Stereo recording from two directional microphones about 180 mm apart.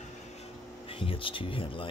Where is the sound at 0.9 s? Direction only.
30° left (ahead or behind).